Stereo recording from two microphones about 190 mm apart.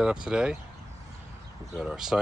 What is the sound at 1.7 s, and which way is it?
Speech, 5° right (ahead or behind).